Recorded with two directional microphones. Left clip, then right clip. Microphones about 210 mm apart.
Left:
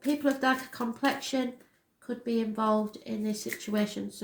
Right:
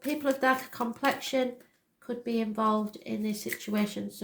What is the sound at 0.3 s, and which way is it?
Speech, 40° right (ahead or behind).